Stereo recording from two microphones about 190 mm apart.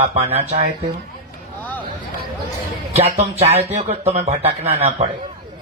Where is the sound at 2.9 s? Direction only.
35° right (ahead or behind).